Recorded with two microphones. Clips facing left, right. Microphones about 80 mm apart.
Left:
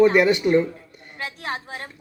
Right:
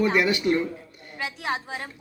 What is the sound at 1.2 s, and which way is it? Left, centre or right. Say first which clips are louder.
Speech: right 1 dB; centre.